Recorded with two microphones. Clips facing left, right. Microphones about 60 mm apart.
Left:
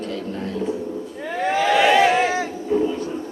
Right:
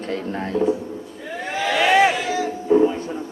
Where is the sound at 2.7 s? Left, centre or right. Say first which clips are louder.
Right 5 dB; right.